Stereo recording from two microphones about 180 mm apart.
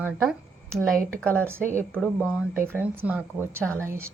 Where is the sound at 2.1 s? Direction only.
5° right (ahead or behind).